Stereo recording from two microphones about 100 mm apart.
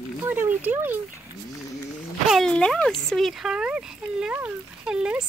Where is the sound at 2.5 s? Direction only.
5° left (ahead or behind).